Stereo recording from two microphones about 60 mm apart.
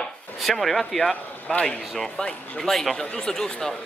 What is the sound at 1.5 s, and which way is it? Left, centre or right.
Speech, left.